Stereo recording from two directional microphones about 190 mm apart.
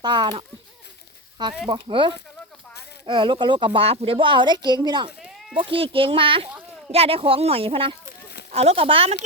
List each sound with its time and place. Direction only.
0.0 s a woman's voice: 25° right (ahead or behind)
1.6 s a woman's voice: 25° right (ahead or behind)